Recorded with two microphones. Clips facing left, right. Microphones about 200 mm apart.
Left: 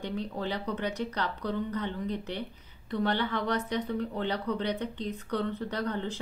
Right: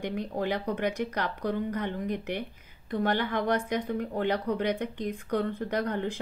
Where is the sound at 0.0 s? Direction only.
15° right (ahead or behind).